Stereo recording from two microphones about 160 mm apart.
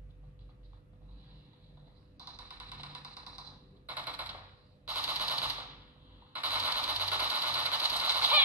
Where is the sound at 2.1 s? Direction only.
10° right (ahead or behind).